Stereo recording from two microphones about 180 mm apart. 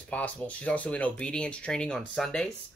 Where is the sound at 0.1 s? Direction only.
10° left (ahead or behind).